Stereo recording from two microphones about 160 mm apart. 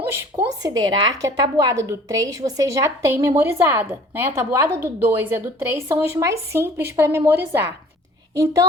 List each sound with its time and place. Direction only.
0.1 s a woman's voice: 20° right (ahead or behind)